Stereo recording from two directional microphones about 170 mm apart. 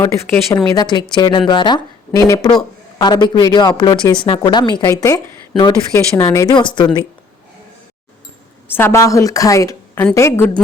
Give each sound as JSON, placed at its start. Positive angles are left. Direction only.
{"t": 0.0, "sound": "a woman's voice", "side_deg": 20}
{"t": 8.7, "sound": "a woman's voice", "side_deg": 15}